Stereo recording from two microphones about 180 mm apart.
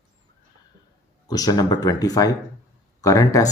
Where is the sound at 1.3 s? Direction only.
20° left (ahead or behind).